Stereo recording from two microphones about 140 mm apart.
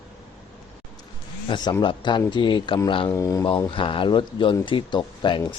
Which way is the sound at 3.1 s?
25° left (ahead or behind).